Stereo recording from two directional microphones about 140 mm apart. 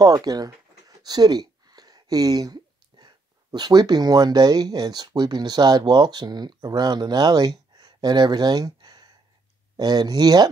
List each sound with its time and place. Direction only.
0.0 s speech: 25° right (ahead or behind)